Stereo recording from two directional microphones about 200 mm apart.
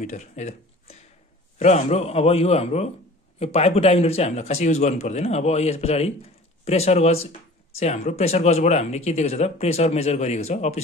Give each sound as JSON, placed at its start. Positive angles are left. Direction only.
{"t": 0.0, "sound": "speech", "side_deg": 35}